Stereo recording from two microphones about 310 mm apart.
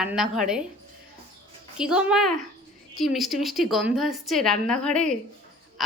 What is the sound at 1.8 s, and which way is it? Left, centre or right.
A woman's voice, centre.